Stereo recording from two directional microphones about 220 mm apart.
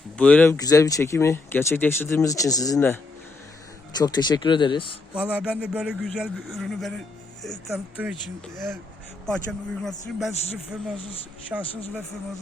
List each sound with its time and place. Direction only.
0.2 s speech: 5° left (ahead or behind)
5.1 s a man's voice: 5° right (ahead or behind)
8.0 s speech: 5° right (ahead or behind)
9.2 s a man's voice: 5° left (ahead or behind)